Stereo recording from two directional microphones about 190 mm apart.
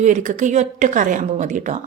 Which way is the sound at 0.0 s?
40° right (ahead or behind).